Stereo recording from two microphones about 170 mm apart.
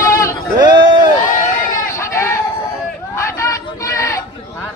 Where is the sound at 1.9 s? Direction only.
15° left (ahead or behind).